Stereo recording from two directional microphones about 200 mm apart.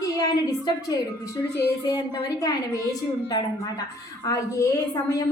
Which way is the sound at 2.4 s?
20° left (ahead or behind).